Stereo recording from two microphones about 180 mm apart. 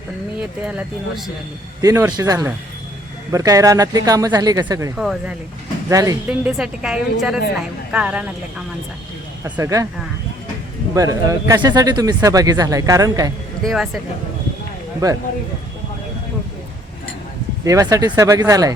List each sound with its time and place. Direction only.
0.7 s speech: 5° right (ahead or behind)
1.8 s speech: 20° right (ahead or behind)
4.9 s speech: centre (ahead or behind)
5.9 s speech: 20° right (ahead or behind)
6.2 s speech: 5° right (ahead or behind)
9.4 s speech: 15° right (ahead or behind)
10.9 s speech: 20° right (ahead or behind)
13.6 s speech: centre (ahead or behind)
17.7 s speech: 20° right (ahead or behind)